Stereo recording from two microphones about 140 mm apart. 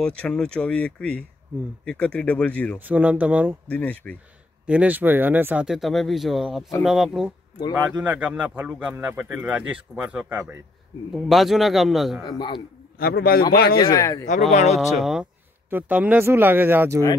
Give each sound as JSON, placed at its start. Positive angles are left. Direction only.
{"t": 0.0, "sound": "speech", "side_deg": 5}
{"t": 2.8, "sound": "speech", "side_deg": -10}
{"t": 3.6, "sound": "speech", "side_deg": 10}
{"t": 4.6, "sound": "speech", "side_deg": -10}
{"t": 5.7, "sound": "a man's voice", "side_deg": 0}
{"t": 12.3, "sound": "a man's voice", "side_deg": 35}
{"t": 13.0, "sound": "a man's voice", "side_deg": 90}
{"t": 13.9, "sound": "speech", "side_deg": 20}
{"t": 14.5, "sound": "speech", "side_deg": 55}
{"t": 15.0, "sound": "a man's voice", "side_deg": 0}